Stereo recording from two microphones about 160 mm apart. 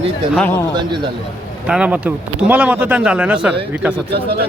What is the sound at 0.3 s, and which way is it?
Speech, 10° left (ahead or behind).